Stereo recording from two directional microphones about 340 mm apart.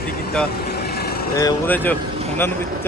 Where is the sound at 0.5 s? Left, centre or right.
Left.